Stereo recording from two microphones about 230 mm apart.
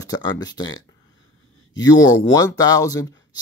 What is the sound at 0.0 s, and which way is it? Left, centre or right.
Speech, centre.